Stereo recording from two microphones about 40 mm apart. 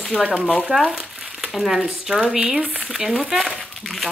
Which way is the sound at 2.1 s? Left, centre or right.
Centre.